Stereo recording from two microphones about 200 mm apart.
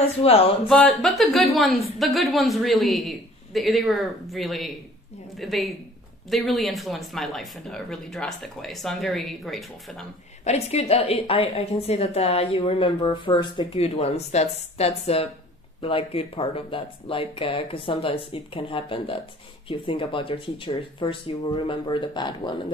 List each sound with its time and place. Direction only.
0.7 s a woman's voice: 5° left (ahead or behind)
10.4 s a woman's voice: 30° left (ahead or behind)